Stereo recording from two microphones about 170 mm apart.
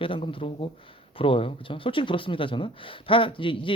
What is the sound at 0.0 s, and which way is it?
Speech, 30° left (ahead or behind).